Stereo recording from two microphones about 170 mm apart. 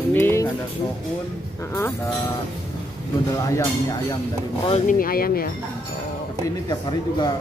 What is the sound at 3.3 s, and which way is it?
Speech, 20° left (ahead or behind).